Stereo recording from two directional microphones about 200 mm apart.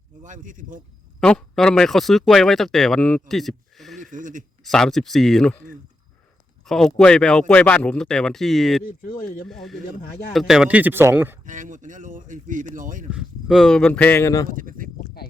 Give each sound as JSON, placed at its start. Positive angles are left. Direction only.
{"t": 0.2, "sound": "speech", "side_deg": -40}
{"t": 1.2, "sound": "speech", "side_deg": 5}
{"t": 4.0, "sound": "speech", "side_deg": -40}
{"t": 4.6, "sound": "speech", "side_deg": 0}
{"t": 6.7, "sound": "speech", "side_deg": 0}
{"t": 11.4, "sound": "speech", "side_deg": -40}
{"t": 13.1, "sound": "speech", "side_deg": -5}
{"t": 14.4, "sound": "speech", "side_deg": -45}